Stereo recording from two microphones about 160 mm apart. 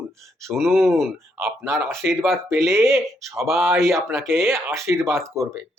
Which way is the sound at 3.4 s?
5° right (ahead or behind).